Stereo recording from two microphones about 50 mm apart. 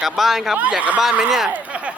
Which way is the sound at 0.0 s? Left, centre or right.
Centre.